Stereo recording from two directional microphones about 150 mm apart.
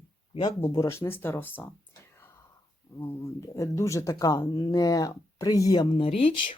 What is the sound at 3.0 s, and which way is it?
Speech, 20° left (ahead or behind).